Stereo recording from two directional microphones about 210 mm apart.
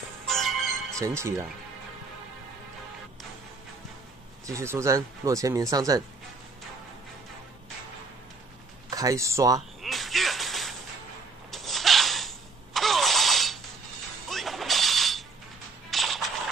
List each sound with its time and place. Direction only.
0.3 s music: centre (ahead or behind)
0.9 s speech: 15° right (ahead or behind)
4.5 s speech: 15° right (ahead or behind)
8.9 s speech: 15° right (ahead or behind)
9.8 s a sound: centre (ahead or behind)
11.5 s engine starting: centre (ahead or behind)
14.3 s mechanisms: centre (ahead or behind)
15.9 s a sound: centre (ahead or behind)